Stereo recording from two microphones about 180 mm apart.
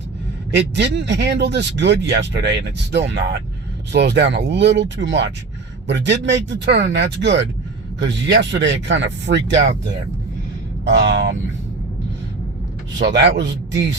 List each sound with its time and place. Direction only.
0.5 s speech: 70° right (ahead or behind)
10.8 s speech: 70° right (ahead or behind)
13.0 s a man's voice: 70° right (ahead or behind)